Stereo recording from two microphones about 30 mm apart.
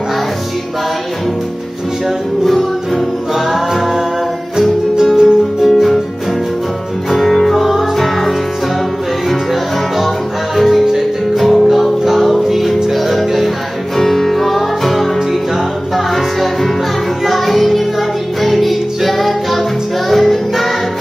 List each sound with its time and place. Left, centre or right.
3.3 s music: centre
5.1 s music: centre
5.7 s music: centre
7.1 s music: centre
9.5 s music: centre
13.9 s music: centre
16.2 s music: centre